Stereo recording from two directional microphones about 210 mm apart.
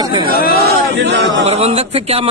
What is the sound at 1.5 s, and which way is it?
Speech, 30° right (ahead or behind).